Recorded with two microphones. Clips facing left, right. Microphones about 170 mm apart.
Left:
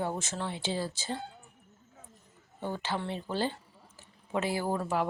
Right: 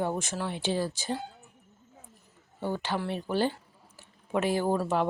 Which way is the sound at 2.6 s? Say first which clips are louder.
Right 3 dB; 15° right (ahead or behind).